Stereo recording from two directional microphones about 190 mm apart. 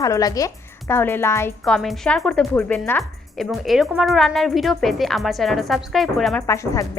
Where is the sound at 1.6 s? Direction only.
Centre (ahead or behind).